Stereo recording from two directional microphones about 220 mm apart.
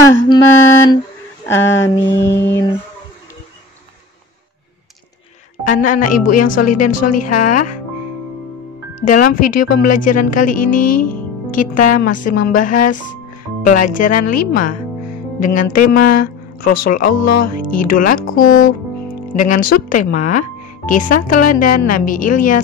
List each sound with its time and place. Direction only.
0.3 s a sound: 10° left (ahead or behind)
5.6 s speech: 35° left (ahead or behind)
9.0 s speech: 35° left (ahead or behind)